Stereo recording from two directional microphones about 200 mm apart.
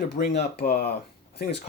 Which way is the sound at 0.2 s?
50° left (ahead or behind).